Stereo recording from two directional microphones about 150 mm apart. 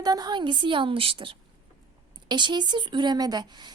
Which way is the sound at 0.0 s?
25° right (ahead or behind).